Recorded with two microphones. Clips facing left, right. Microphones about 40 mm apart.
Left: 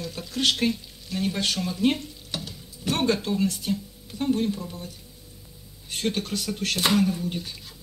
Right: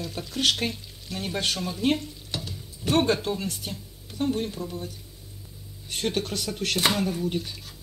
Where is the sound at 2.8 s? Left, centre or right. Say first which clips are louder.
Right 1 dB; right.